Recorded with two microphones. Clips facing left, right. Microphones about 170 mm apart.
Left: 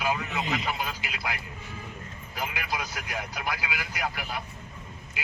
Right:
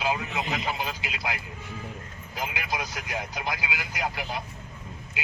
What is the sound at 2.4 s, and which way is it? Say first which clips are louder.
Speech: right 1 dB; 20° right (ahead or behind).